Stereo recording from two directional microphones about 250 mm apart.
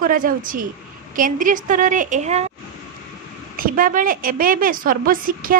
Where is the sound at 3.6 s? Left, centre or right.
Right.